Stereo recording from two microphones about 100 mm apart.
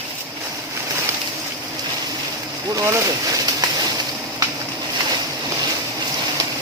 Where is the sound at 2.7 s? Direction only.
30° right (ahead or behind).